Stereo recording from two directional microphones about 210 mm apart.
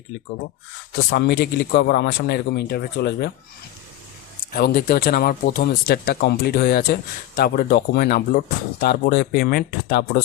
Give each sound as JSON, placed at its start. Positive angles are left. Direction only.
{"t": 0.9, "sound": "speech", "side_deg": 50}
{"t": 4.5, "sound": "speech", "side_deg": 45}